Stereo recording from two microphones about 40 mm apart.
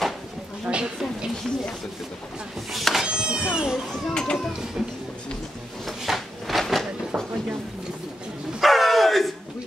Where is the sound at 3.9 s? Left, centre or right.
Centre.